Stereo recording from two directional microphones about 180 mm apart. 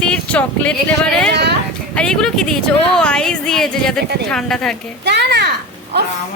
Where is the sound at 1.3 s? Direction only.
70° right (ahead or behind).